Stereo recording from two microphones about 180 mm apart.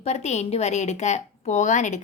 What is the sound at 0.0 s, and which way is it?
A woman's voice, 40° left (ahead or behind).